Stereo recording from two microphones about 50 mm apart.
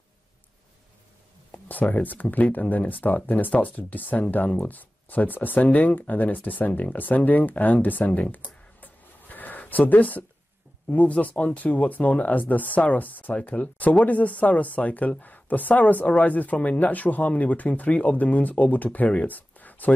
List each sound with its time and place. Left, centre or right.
1.5 s speech: left
8.8 s a sound: left
10.9 s speech: left